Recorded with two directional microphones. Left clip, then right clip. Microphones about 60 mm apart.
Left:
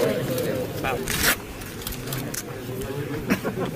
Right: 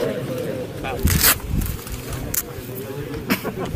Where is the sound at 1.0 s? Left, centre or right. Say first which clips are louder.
Right 5 dB; right.